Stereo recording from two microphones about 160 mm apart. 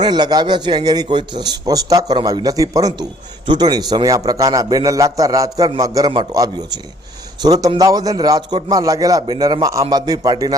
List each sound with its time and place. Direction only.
0.0 s a man's voice: 25° right (ahead or behind)